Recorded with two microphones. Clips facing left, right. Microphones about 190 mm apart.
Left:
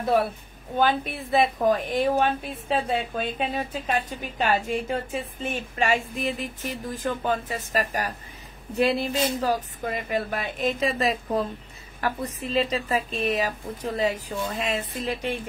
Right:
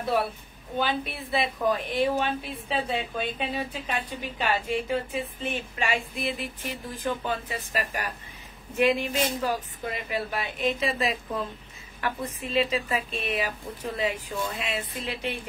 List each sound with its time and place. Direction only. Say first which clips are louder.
0.7 s a woman's voice: left 5 dB; 45° left (ahead or behind)